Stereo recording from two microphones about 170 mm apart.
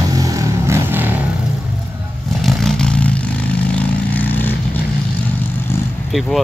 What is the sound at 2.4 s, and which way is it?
Vehicle, centre (ahead or behind).